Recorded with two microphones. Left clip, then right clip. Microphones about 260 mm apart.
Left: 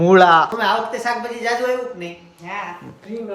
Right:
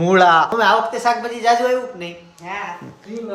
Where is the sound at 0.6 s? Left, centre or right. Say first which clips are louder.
Right 4 dB; centre.